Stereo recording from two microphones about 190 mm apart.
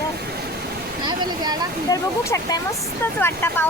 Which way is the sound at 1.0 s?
20° right (ahead or behind).